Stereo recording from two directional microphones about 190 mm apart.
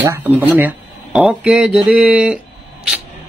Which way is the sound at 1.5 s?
5° right (ahead or behind).